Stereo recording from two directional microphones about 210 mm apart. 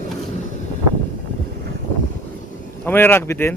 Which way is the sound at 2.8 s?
10° left (ahead or behind).